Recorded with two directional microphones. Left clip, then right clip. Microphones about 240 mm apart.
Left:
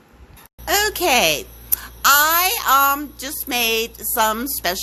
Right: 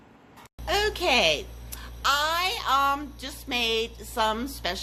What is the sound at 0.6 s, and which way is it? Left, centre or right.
A child's voice, left.